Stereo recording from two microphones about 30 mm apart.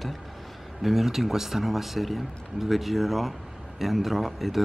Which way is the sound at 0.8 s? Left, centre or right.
Centre.